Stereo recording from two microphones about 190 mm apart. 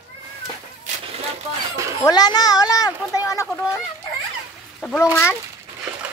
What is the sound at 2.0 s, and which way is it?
Speech, 20° left (ahead or behind).